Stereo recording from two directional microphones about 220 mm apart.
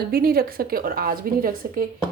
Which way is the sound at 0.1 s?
45° right (ahead or behind).